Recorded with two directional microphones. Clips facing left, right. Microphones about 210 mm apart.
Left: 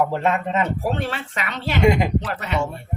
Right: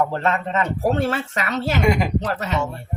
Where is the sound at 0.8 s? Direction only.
45° right (ahead or behind).